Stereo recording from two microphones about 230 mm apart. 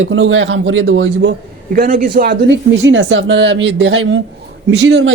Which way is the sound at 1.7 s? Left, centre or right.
Right.